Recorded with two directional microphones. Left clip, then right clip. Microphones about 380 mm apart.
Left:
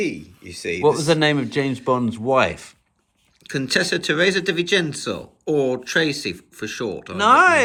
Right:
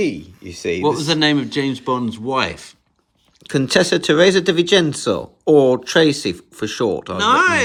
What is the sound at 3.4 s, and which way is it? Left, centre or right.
Speech, centre.